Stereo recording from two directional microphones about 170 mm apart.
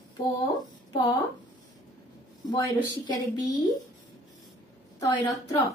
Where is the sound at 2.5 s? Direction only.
25° left (ahead or behind).